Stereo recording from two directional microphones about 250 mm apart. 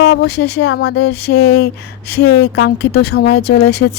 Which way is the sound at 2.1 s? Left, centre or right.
Left.